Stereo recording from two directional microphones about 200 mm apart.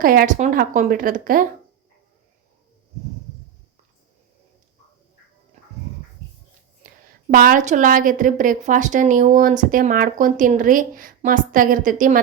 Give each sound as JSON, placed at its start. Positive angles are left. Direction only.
{"t": 0.0, "sound": "a woman's voice", "side_deg": -45}
{"t": 6.8, "sound": "a sound", "side_deg": -40}
{"t": 7.3, "sound": "a woman's voice", "side_deg": -45}